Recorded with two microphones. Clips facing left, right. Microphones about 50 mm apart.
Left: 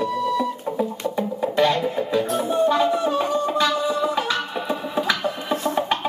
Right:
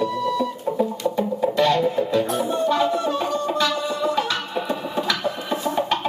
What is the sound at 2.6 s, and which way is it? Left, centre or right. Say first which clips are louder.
Music: left 3 dB; centre.